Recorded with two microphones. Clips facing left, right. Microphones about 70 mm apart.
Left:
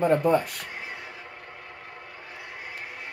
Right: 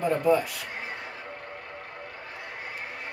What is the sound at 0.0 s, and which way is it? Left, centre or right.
Speech, left.